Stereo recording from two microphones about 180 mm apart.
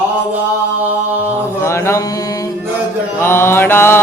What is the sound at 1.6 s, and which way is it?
Chant, 15° left (ahead or behind).